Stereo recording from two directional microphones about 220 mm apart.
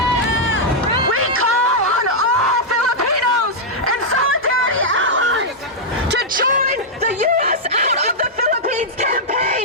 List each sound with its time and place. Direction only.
1.1 s a sound: 70° right (ahead or behind); by 3.2 s 90° right
3.8 s snicker: 75° right (ahead or behind)
6.1 s snicker: 45° right (ahead or behind)